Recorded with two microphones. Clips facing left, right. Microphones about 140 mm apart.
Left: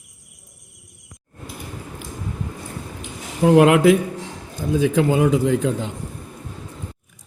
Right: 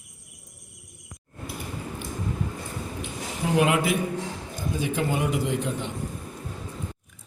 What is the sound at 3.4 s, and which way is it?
Speech, 85° left.